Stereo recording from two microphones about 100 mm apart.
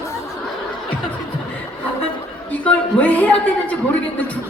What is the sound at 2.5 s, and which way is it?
A man's voice, 15° left (ahead or behind).